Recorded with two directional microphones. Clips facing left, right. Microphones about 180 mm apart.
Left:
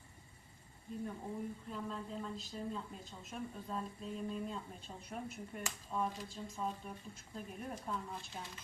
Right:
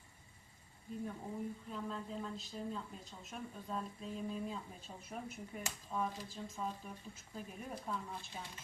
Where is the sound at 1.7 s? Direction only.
Centre (ahead or behind).